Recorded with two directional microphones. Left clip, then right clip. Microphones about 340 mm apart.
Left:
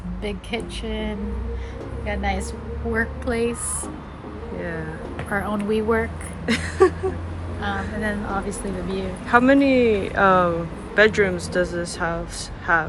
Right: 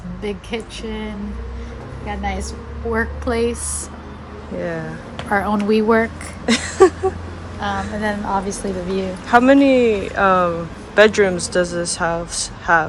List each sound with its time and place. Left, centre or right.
0.2 s a woman's voice: centre
4.6 s a woman's voice: centre
5.3 s speech: right
6.4 s a woman's voice: centre